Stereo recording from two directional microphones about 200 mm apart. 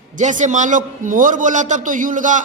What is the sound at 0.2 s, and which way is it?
A man's voice, 40° right (ahead or behind).